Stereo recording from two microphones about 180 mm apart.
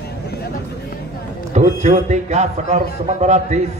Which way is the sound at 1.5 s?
40° right (ahead or behind).